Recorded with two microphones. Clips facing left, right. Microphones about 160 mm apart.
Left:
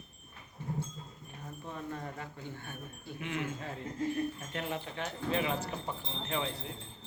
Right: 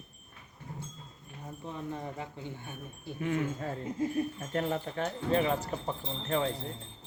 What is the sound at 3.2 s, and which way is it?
Speech, 45° right (ahead or behind).